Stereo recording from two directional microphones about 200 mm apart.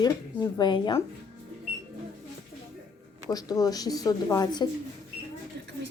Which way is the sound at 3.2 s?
20° left (ahead or behind).